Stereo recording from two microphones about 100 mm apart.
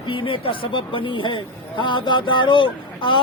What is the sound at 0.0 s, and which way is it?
A man's voice, 60° left (ahead or behind).